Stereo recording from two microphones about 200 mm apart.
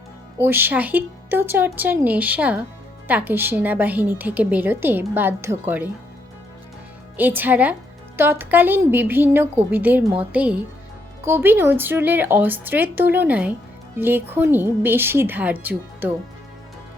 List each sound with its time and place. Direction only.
0.3 s a woman's voice: 10° right (ahead or behind)
7.2 s a woman's voice: 10° right (ahead or behind)